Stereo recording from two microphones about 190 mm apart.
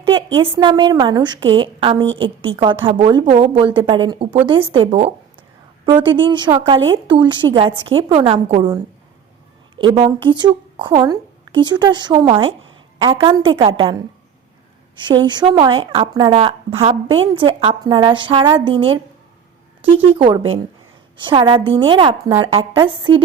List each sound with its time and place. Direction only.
0.0 s a sound: 25° right (ahead or behind)
0.6 s a woman's voice: 25° right (ahead or behind)
9.7 s a woman's voice: 30° right (ahead or behind)
20.1 s a woman's voice: 25° right (ahead or behind)